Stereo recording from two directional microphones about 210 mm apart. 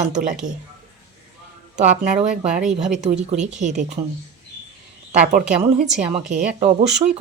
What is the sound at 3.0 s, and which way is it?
Speech, 30° right (ahead or behind).